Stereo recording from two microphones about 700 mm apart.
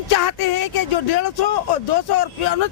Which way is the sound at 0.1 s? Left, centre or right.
Left.